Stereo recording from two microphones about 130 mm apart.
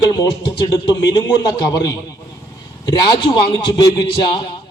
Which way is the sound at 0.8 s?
30° left (ahead or behind).